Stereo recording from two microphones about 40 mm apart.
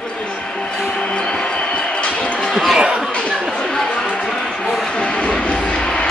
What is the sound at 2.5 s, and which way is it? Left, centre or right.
Chatter, centre.